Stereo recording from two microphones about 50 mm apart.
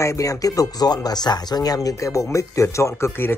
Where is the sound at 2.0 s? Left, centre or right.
Left.